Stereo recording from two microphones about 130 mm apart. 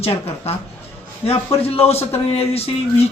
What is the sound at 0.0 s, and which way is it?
A man's voice, 50° left (ahead or behind).